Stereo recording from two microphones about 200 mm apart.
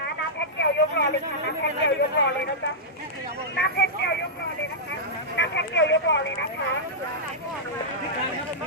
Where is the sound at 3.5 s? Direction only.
55° left (ahead or behind).